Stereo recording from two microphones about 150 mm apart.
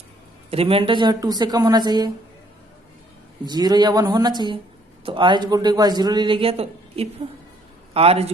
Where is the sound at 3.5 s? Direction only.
25° right (ahead or behind).